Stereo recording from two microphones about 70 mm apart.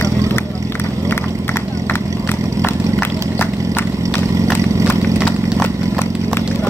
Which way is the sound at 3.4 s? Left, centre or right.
Left.